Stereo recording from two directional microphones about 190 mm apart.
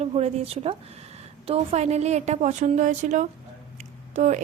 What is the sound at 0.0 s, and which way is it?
A woman's voice, 35° right (ahead or behind).